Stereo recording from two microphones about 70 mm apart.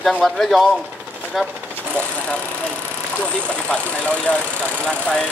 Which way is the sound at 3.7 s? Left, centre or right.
Centre.